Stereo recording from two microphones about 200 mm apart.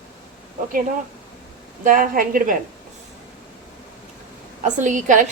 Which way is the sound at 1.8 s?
45° right (ahead or behind).